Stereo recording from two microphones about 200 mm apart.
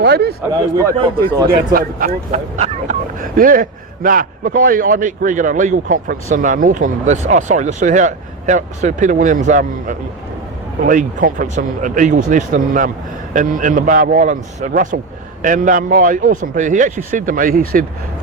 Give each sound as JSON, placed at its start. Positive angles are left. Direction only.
{"t": 0.0, "sound": "speech", "side_deg": -55}
{"t": 1.5, "sound": "speech", "side_deg": -45}